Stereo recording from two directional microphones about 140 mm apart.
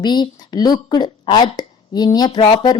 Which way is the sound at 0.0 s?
30° left (ahead or behind).